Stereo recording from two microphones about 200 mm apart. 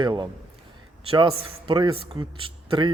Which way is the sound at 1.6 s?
25° right (ahead or behind).